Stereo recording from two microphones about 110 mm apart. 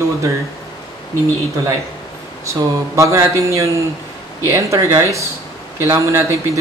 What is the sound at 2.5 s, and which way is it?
Speech, 30° right (ahead or behind).